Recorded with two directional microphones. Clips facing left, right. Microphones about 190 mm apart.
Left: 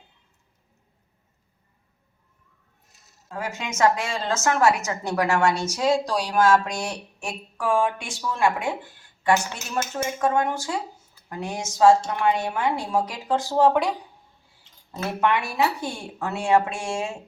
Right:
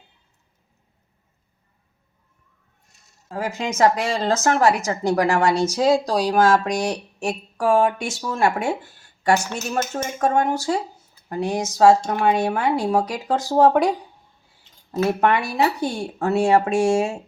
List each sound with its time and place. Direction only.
2.8 s a sound: centre (ahead or behind)
3.2 s speech: 35° right (ahead or behind)
15.2 s speech: 40° right (ahead or behind)